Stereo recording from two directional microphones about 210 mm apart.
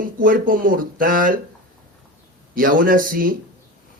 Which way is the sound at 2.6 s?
40° right (ahead or behind).